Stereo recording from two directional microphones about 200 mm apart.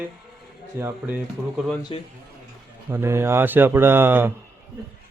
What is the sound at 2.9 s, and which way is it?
Speech, 10° right (ahead or behind).